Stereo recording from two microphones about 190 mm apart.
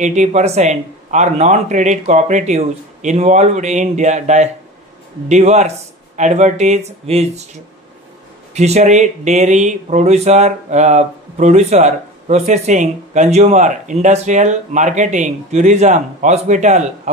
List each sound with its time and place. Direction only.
0.0 s speech: 35° right (ahead or behind)
8.5 s speech: 35° right (ahead or behind)